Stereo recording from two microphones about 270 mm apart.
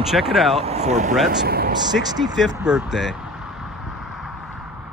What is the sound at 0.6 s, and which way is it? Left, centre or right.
Speech, right.